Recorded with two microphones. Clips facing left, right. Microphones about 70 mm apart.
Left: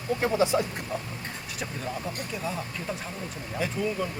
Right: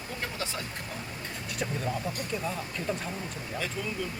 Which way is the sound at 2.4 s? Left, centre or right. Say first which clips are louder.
Left 2 dB; centre.